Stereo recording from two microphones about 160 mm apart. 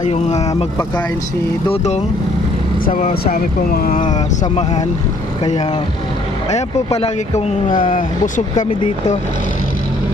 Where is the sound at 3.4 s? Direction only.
65° left (ahead or behind).